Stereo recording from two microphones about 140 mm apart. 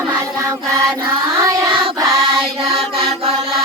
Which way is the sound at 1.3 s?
25° right (ahead or behind).